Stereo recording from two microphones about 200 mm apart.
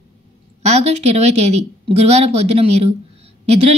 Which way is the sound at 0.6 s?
35° right (ahead or behind).